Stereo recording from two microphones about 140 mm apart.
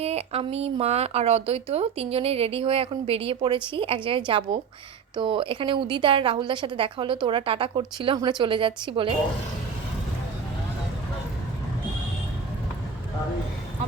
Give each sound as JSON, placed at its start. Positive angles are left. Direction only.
{"t": 0.0, "sound": "a woman's voice", "side_deg": -45}